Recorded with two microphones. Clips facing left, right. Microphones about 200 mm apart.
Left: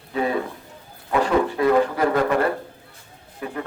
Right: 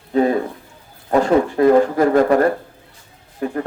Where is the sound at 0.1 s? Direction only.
40° right (ahead or behind).